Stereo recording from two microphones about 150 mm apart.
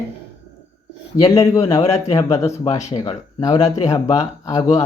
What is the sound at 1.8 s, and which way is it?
Speech, 45° left (ahead or behind).